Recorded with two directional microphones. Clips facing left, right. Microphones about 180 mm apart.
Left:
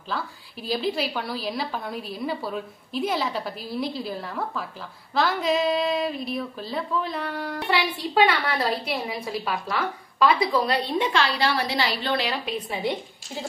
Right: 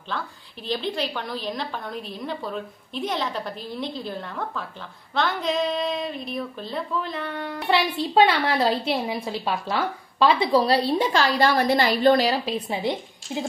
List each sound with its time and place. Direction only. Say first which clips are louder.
0.7 s a woman's voice: left 1 dB; 5° left (ahead or behind)
7.7 s a woman's voice: right 4 dB; 25° right (ahead or behind); by 12.5 s 40° right (ahead or behind)